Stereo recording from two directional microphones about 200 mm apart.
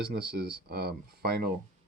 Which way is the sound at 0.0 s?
50° right (ahead or behind).